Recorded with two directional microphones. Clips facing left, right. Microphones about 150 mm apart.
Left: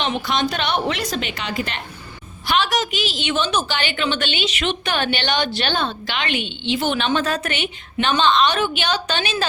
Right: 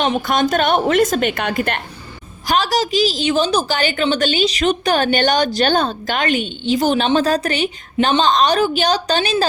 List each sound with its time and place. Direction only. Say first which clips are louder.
0.0 s a woman's voice: right 5 dB; 45° right (ahead or behind)
2.5 s a woman's voice: right 3 dB; 35° right (ahead or behind)